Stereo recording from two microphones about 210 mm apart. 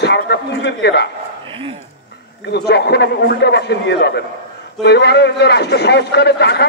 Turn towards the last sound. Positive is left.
turn(degrees=50)  # may be behind; listen again after turning